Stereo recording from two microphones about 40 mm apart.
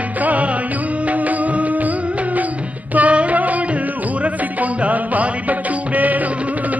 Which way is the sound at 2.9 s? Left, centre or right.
Right.